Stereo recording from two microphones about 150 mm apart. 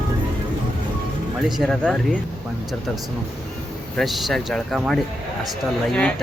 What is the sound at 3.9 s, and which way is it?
Speech, centre (ahead or behind).